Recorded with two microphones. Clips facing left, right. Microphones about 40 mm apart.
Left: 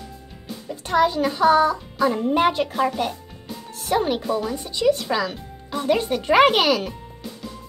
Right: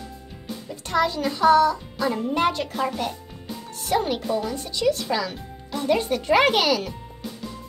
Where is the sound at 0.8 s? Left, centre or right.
Left.